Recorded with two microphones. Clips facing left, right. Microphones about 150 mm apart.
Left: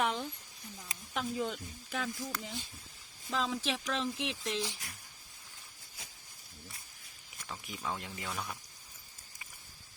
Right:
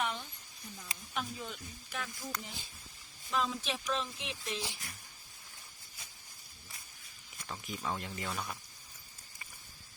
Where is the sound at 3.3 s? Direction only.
90° left.